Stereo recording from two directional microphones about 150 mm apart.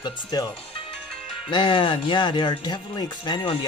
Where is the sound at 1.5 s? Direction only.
30° left (ahead or behind).